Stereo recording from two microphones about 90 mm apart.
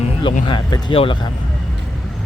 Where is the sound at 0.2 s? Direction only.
75° left (ahead or behind).